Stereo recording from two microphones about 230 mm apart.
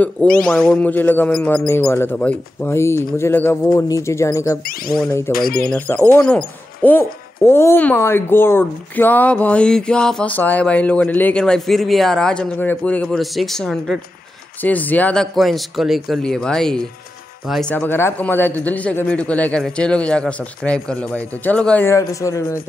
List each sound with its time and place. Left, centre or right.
0.4 s speech: centre
4.6 s speech: left
5.0 s speech: centre
5.3 s speech: left
5.7 s speech: centre